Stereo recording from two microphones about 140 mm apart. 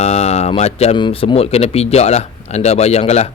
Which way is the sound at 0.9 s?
40° left (ahead or behind).